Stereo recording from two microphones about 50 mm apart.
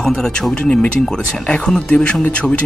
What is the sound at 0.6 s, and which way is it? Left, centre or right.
Speech, centre.